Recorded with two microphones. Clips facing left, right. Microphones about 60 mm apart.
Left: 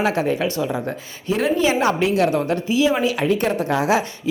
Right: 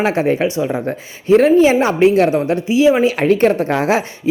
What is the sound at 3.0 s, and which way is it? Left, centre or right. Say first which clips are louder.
Speech: right 6 dB; right.